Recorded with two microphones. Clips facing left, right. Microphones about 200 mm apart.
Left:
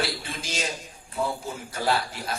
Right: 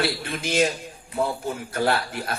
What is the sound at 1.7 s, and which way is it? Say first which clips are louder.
Speech: right 2 dB; 55° right (ahead or behind).